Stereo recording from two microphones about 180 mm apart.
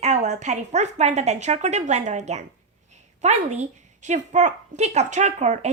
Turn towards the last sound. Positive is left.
turn(degrees=-40)  # may be behind; listen again after turning